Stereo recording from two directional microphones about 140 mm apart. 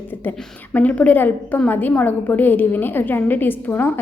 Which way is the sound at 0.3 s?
10° left (ahead or behind).